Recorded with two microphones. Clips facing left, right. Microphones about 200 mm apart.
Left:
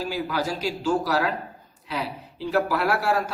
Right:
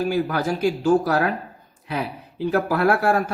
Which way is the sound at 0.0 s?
55° right (ahead or behind).